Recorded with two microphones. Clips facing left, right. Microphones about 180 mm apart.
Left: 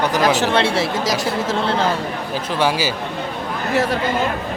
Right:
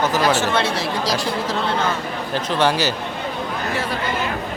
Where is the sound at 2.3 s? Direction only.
10° left (ahead or behind).